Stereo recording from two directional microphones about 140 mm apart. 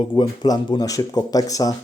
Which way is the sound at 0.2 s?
30° left (ahead or behind).